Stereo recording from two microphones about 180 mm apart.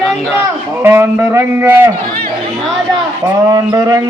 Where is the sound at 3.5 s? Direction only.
20° right (ahead or behind).